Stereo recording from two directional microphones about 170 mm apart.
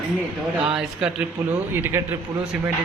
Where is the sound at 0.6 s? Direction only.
5° right (ahead or behind).